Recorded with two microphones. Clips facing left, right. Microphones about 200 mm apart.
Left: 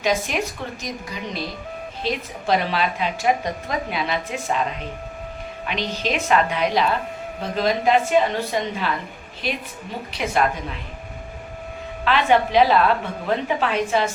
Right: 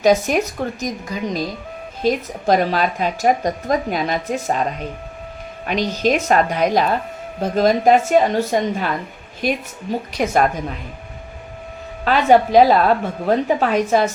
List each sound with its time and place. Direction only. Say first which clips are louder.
0.0 s a woman's voice: right 7 dB; 40° right (ahead or behind)
5.6 s a woman's voice: right 7 dB; 45° right (ahead or behind)
12.0 s a woman's voice: right 5 dB; 40° right (ahead or behind)